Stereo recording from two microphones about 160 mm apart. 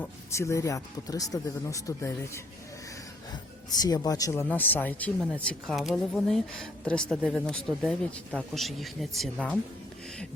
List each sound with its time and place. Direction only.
0.0 s speech: 20° left (ahead or behind)
3.7 s speech: 25° left (ahead or behind); by 9.6 s 5° left (ahead or behind)